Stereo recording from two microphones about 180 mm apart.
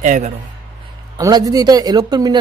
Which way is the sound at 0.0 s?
40° right (ahead or behind).